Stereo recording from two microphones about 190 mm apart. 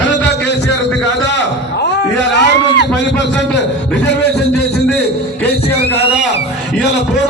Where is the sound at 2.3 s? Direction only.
70° left (ahead or behind).